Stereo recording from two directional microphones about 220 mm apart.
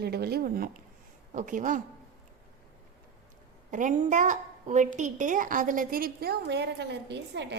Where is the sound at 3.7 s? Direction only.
35° right (ahead or behind).